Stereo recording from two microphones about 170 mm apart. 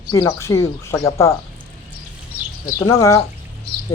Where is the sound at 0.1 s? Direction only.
15° left (ahead or behind).